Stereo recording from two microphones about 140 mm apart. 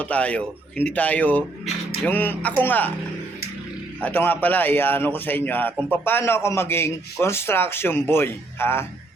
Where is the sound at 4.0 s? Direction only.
10° left (ahead or behind).